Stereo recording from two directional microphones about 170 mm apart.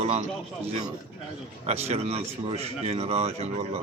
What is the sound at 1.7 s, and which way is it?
Speech, 40° right (ahead or behind).